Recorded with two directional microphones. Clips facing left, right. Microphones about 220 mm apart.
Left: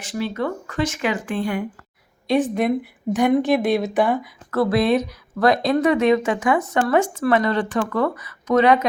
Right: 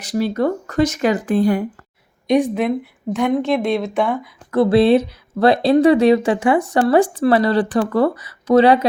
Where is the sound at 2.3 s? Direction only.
10° right (ahead or behind).